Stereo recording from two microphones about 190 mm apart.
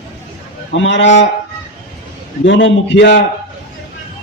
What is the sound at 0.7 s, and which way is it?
Speech, 75° left (ahead or behind).